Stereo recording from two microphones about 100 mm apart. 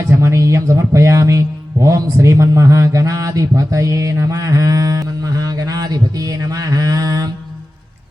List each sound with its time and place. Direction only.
0.1 s speech: 30° right (ahead or behind)